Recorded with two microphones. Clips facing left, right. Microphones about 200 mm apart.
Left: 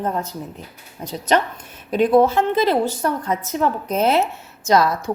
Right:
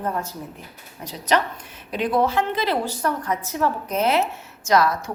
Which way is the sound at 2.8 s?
25° left (ahead or behind).